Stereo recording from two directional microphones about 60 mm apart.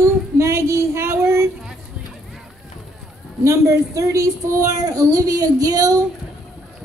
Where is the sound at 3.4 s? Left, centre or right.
Right.